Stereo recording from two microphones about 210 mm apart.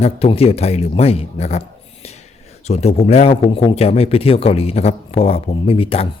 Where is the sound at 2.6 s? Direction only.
30° left (ahead or behind).